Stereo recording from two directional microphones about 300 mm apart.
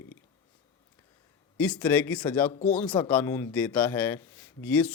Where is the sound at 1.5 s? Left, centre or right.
Centre.